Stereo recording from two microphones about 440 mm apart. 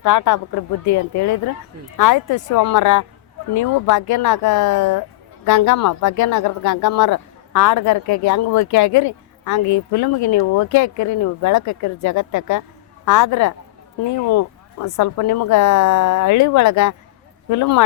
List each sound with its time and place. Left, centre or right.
0.0 s speech: left